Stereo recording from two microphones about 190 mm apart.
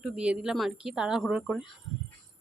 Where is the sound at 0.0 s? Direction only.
5° right (ahead or behind).